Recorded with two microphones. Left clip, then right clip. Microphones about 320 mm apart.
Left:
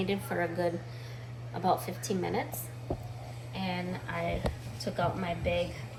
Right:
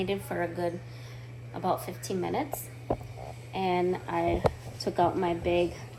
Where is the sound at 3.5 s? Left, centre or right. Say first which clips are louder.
Right 9 dB; right.